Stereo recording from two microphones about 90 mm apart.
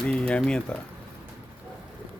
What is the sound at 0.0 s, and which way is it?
Speech, 10° left (ahead or behind).